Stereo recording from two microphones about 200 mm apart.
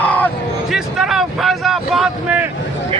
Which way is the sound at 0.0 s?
5° left (ahead or behind).